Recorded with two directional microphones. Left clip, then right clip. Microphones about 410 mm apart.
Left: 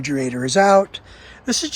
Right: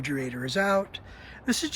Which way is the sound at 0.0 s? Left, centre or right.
Centre.